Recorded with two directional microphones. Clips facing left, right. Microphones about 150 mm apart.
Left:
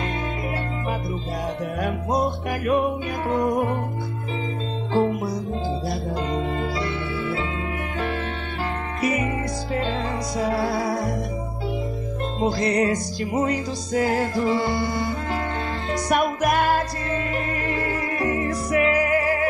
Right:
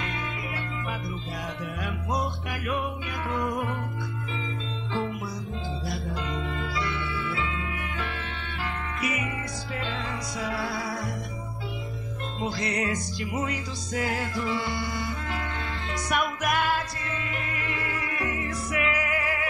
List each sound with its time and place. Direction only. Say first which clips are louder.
1.8 s music: left 7 dB; 40° left (ahead or behind)
4.9 s music: left 10 dB; 40° left (ahead or behind)
9.0 s music: left 9 dB; 40° left (ahead or behind)
12.4 s music: left 8 dB; 35° left (ahead or behind)